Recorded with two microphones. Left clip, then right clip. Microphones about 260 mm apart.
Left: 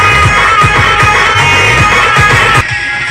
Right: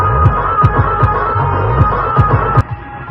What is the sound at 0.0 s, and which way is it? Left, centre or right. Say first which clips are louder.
Music: left 8 dB; left.